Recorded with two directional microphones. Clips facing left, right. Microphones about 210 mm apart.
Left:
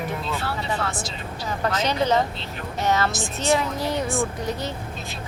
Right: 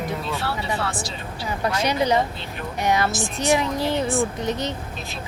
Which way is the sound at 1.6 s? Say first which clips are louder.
Right 1 dB; 10° right (ahead or behind).